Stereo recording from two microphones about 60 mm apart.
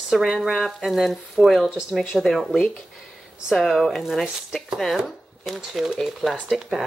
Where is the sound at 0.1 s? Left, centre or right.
Centre.